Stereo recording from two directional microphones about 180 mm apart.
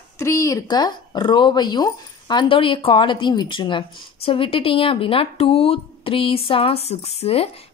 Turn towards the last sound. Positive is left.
turn(degrees=35)  # may be behind; listen again after turning